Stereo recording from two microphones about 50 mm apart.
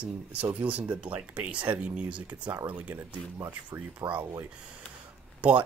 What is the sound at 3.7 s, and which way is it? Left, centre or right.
Speech, right.